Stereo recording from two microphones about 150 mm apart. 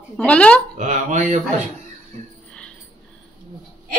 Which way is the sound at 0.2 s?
10° left (ahead or behind).